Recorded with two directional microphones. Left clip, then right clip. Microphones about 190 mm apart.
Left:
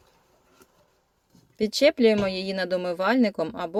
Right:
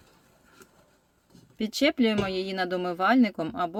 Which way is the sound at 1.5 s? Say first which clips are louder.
Left 5 dB; 25° left (ahead or behind).